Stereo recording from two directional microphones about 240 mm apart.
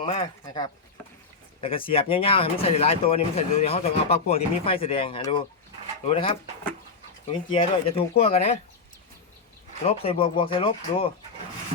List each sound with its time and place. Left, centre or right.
0.0 s speech: left
10.0 s speech: left